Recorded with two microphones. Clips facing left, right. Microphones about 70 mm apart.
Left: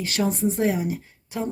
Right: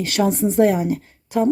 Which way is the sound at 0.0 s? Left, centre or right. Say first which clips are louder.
Right 5 dB; right.